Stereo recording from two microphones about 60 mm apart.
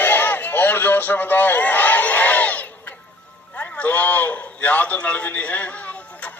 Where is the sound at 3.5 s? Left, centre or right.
Left.